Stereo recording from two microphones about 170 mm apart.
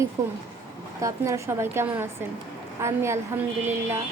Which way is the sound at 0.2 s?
20° right (ahead or behind).